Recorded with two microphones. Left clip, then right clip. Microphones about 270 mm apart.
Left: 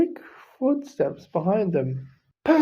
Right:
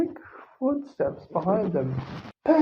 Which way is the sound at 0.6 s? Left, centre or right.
Left.